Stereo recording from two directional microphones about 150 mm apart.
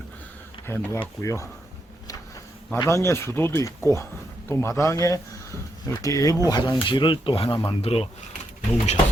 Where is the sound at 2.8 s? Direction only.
20° left (ahead or behind); by 8.1 s 40° left (ahead or behind).